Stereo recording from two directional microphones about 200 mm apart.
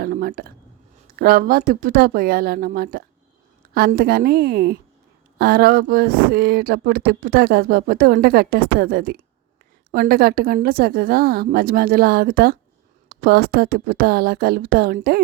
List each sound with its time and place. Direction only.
0.0 s speech: 45° right (ahead or behind)